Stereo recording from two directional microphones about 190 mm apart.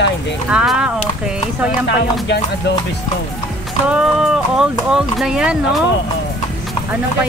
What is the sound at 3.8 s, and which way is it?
Speech, 5° right (ahead or behind).